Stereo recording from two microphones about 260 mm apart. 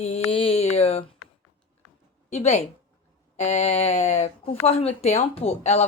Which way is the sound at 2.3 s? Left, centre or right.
Left.